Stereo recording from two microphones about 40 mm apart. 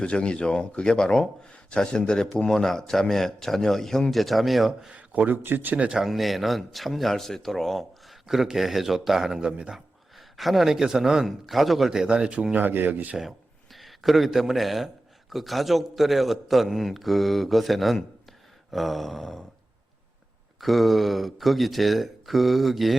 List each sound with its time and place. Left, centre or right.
0.0 s a man's voice: left; by 4.9 s centre
4.9 s a sound: right
5.3 s speech: right
6.1 s a man's voice: centre
8.3 s a man's voice: centre
9.5 s speech: right
9.7 s speech: centre
11.3 s a man's voice: centre
11.9 s a man's voice: centre
12.1 s speech: right
12.5 s speech: right
13.7 s a man's voice: centre
20.6 s a man's voice: centre